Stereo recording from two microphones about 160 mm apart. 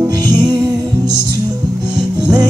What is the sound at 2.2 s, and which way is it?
Music, 25° right (ahead or behind).